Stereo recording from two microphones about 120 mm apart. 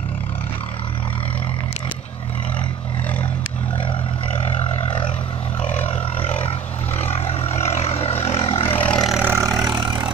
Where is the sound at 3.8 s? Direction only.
45° left (ahead or behind).